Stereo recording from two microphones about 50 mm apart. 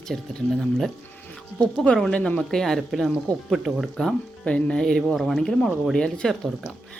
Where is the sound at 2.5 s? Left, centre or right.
Centre.